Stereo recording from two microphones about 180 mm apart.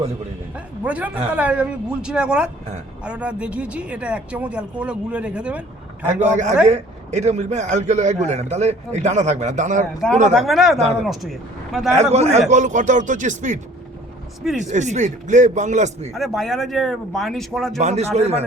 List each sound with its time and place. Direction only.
0.5 s speech: 10° right (ahead or behind)
6.2 s a man's voice: 40° right (ahead or behind)
10.3 s speech: centre (ahead or behind)
11.9 s a man's voice: 35° right (ahead or behind)
14.7 s a man's voice: 40° right (ahead or behind)
16.1 s speech: centre (ahead or behind)
17.7 s a man's voice: 40° right (ahead or behind)